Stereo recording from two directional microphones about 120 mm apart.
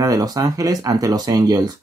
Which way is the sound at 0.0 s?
30° right (ahead or behind).